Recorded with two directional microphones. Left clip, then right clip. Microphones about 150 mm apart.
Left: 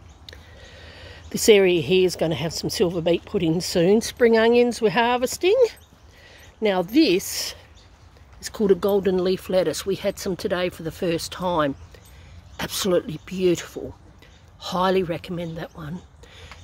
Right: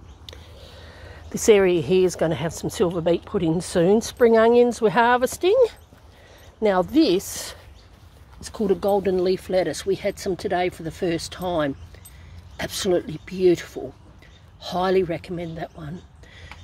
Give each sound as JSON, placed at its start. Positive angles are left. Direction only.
{"t": 0.6, "sound": "speech", "side_deg": 25}
{"t": 5.5, "sound": "speech", "side_deg": 25}
{"t": 6.6, "sound": "speech", "side_deg": 10}
{"t": 8.4, "sound": "speech", "side_deg": 35}